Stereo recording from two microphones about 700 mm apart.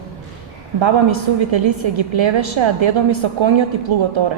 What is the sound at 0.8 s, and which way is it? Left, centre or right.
A woman's voice, right.